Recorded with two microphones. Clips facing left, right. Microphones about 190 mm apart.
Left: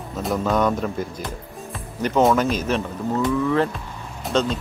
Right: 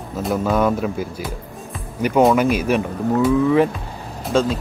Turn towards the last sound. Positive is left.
turn(degrees=-5)  # may be behind; listen again after turning